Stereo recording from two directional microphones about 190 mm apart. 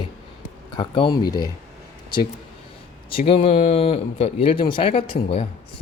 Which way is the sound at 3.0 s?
30° left (ahead or behind).